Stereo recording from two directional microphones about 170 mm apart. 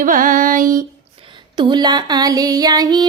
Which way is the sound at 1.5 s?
25° right (ahead or behind).